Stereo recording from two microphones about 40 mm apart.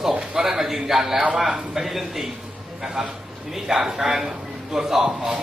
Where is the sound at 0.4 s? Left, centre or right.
Centre.